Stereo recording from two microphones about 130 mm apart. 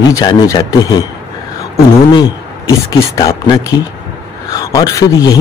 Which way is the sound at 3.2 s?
30° left (ahead or behind).